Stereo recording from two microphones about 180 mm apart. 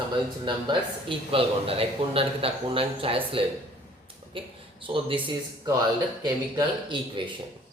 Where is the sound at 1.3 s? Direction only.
30° right (ahead or behind).